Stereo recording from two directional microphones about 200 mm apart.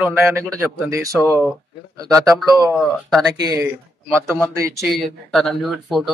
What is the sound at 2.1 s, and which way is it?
Speech, centre (ahead or behind).